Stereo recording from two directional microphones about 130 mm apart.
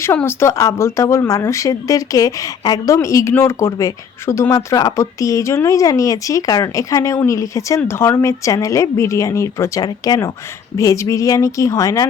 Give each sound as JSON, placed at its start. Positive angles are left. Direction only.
{"t": 0.0, "sound": "speech", "side_deg": 15}